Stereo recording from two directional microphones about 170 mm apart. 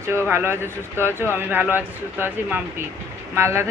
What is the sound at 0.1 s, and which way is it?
Speech, 15° right (ahead or behind).